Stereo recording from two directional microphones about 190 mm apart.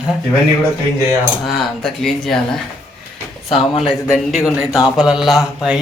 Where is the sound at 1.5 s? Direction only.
Centre (ahead or behind).